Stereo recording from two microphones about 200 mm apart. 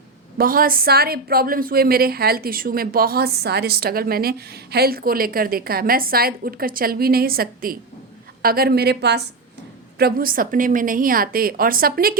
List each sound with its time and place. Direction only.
0.3 s a woman's voice: 45° right (ahead or behind)